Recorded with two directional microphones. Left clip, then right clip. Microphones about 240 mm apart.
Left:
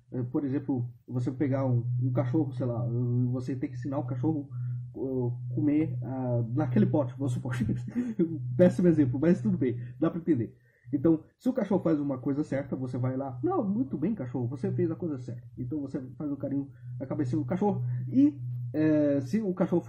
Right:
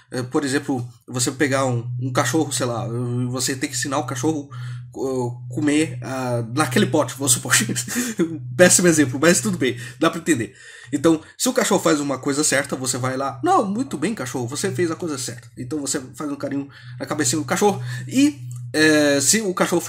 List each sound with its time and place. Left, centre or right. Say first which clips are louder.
0.1 s speech: right 10 dB; right
3.4 s speech: right 11 dB; centre
5.7 s speech: right 9 dB; centre